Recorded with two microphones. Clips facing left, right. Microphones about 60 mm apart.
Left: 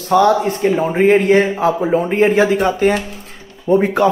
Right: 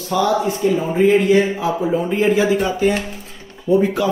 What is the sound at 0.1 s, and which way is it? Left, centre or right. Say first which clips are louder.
Speech: left 5 dB; left.